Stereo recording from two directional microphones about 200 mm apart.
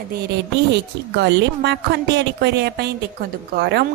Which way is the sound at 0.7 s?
60° right (ahead or behind).